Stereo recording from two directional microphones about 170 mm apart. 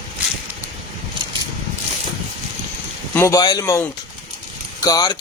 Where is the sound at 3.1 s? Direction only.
15° left (ahead or behind).